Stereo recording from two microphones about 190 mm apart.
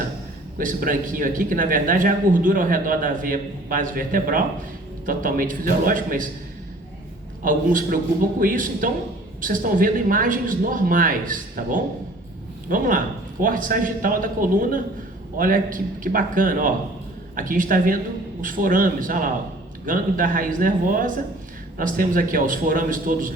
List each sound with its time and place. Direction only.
0.6 s speech: 45° right (ahead or behind)
7.4 s speech: 45° right (ahead or behind)